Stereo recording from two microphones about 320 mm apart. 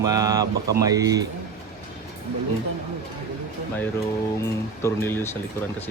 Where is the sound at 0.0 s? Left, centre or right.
Centre.